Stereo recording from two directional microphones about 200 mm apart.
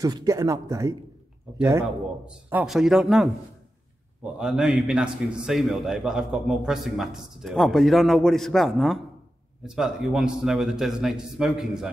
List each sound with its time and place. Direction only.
0.0 s a man's voice: 20° right (ahead or behind); by 11.9 s centre (ahead or behind)